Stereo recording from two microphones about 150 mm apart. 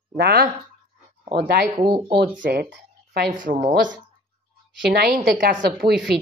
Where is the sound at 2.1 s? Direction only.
80° right.